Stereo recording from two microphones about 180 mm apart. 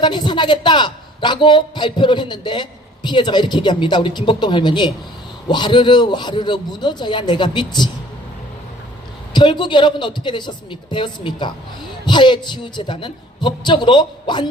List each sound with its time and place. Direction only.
0.0 s speech: 25° left (ahead or behind)
9.3 s speech: 25° left (ahead or behind)